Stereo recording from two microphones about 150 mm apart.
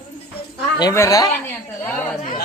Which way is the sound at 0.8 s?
20° left (ahead or behind).